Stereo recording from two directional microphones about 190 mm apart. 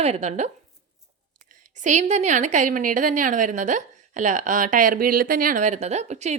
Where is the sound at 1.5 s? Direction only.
40° right (ahead or behind).